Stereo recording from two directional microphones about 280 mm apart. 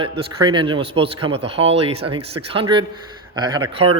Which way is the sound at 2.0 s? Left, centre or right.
Right.